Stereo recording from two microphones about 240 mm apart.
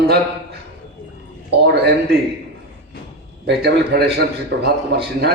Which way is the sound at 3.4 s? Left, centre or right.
Right.